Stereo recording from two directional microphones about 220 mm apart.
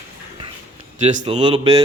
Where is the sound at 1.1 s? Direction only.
30° right (ahead or behind).